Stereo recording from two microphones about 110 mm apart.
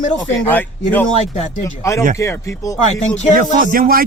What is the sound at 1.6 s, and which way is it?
Speech, 30° left (ahead or behind).